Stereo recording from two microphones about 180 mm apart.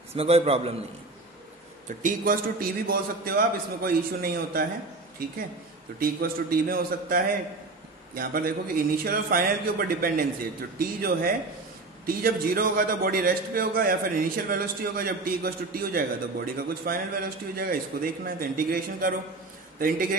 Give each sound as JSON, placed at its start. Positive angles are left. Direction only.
{"t": 0.1, "sound": "a man's voice", "side_deg": -35}
{"t": 1.9, "sound": "a man's voice", "side_deg": -50}
{"t": 5.9, "sound": "a man's voice", "side_deg": -55}